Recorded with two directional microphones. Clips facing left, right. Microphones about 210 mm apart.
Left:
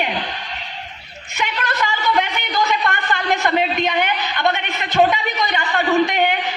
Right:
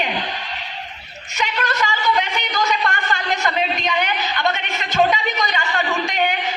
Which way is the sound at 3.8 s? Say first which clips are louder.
Left 2 dB; 55° left (ahead or behind).